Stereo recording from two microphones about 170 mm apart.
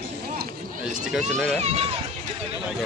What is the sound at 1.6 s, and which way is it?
Speech, 35° right (ahead or behind).